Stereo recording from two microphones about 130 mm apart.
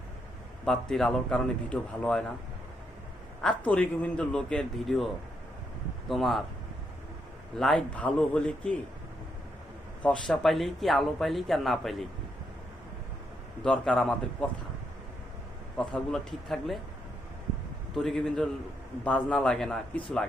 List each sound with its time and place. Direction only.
0.6 s a man's voice: 5° left (ahead or behind)
3.4 s a man's voice: 10° left (ahead or behind)
7.6 s a man's voice: 5° left (ahead or behind)
10.0 s a man's voice: 5° left (ahead or behind)
13.7 s a man's voice: 10° left (ahead or behind)
15.8 s a man's voice: 5° left (ahead or behind)
17.9 s a man's voice: centre (ahead or behind)